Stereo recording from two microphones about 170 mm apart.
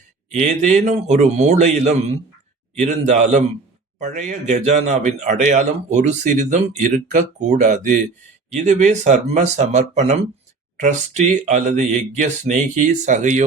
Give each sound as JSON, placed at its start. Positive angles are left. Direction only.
{"t": 0.3, "sound": "a man's voice", "side_deg": -45}